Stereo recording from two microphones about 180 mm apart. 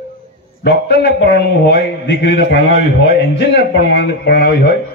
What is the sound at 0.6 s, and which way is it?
A man's voice, 60° left (ahead or behind).